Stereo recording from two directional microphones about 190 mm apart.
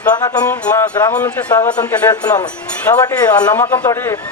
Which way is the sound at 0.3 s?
5° left (ahead or behind).